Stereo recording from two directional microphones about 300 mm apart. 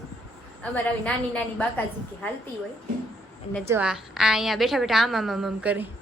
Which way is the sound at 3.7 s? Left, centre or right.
Centre.